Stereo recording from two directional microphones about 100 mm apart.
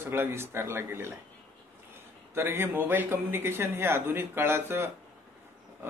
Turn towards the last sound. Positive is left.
turn(degrees=-25)  # may be behind; listen again after turning